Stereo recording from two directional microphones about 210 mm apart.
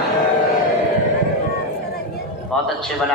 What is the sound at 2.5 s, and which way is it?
Speech, centre (ahead or behind).